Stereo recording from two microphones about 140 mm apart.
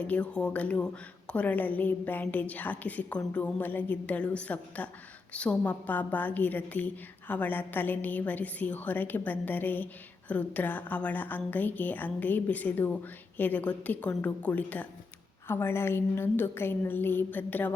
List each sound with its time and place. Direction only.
0.0 s a woman's voice: 10° left (ahead or behind)